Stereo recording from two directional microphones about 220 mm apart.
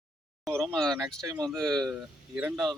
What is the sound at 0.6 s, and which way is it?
Speech, centre (ahead or behind).